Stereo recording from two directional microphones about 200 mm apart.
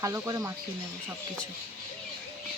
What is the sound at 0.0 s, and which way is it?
Speech, 15° right (ahead or behind).